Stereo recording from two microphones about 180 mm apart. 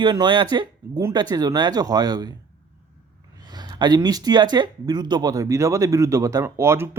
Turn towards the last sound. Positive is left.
turn(degrees=-15)  # may be behind; listen again after turning